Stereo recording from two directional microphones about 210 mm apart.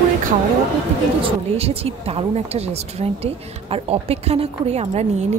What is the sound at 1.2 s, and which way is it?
Speech, 25° right (ahead or behind).